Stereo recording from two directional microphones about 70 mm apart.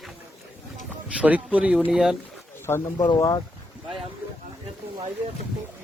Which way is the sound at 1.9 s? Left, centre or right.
Centre.